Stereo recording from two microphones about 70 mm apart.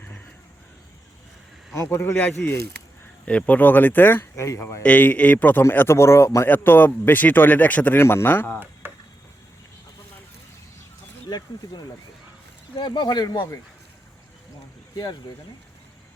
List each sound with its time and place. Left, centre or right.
1.7 s a man's voice: left
2.1 s speech: left
4.4 s a man's voice: left
4.8 s speech: left
7.9 s speech: left
8.5 s a sound: right
11.3 s speech: left
12.8 s speech: left